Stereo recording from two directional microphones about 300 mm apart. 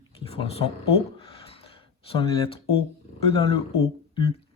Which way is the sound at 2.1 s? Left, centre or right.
Centre.